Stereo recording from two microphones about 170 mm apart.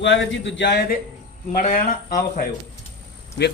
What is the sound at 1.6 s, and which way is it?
Speech, 55° left (ahead or behind).